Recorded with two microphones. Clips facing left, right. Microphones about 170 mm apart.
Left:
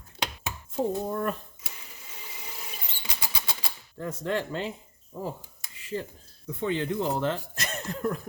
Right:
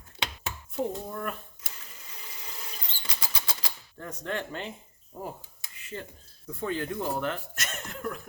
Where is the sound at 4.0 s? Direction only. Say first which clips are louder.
Left 5 dB; 30° left (ahead or behind).